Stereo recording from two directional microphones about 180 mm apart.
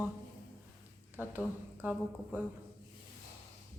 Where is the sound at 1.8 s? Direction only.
10° right (ahead or behind).